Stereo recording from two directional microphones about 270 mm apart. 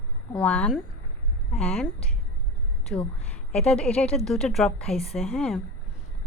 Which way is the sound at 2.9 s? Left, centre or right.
Centre.